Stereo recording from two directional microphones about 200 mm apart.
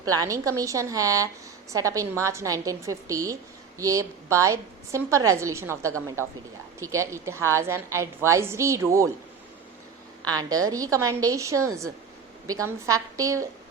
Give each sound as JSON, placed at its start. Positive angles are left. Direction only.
{"t": 0.0, "sound": "a woman's voice", "side_deg": -15}
{"t": 10.2, "sound": "a woman's voice", "side_deg": -20}